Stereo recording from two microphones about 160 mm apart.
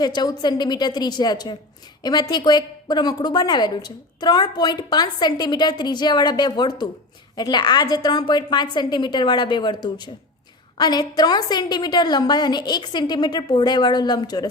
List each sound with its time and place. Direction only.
0.0 s a woman's voice: 25° left (ahead or behind)